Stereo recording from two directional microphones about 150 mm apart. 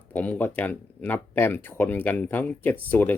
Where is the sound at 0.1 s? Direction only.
10° left (ahead or behind).